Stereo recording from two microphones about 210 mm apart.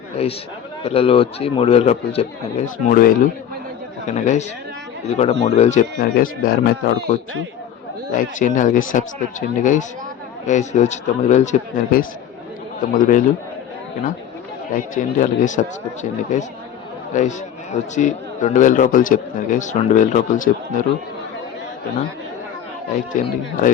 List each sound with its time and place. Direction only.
0.2 s a man's voice: 30° left (ahead or behind)
10.4 s a man's voice: 35° left (ahead or behind)
14.7 s a man's voice: 35° left (ahead or behind)
23.1 s a man's voice: 35° left (ahead or behind)